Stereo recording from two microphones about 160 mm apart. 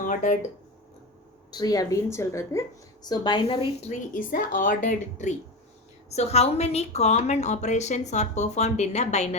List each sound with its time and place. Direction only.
0.0 s speech: 50° left (ahead or behind)
1.5 s a woman's voice: 25° left (ahead or behind); by 3.9 s 40° left (ahead or behind)
4.1 s a woman's voice: 60° left (ahead or behind)